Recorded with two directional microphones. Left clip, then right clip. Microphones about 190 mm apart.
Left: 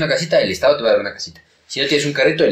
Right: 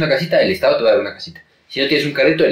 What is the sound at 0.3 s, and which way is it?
Speech, 35° left (ahead or behind).